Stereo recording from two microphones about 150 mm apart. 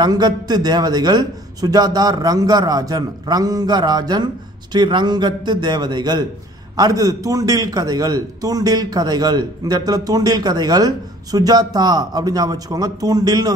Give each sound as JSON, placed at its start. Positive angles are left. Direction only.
{"t": 0.0, "sound": "a man's voice", "side_deg": -25}